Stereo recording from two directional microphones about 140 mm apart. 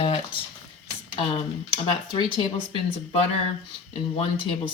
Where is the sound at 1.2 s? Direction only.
40° left (ahead or behind).